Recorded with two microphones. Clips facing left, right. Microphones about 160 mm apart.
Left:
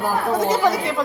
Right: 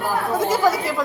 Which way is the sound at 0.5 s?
Centre (ahead or behind).